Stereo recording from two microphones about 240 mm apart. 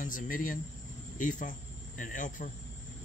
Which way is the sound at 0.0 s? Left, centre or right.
Left.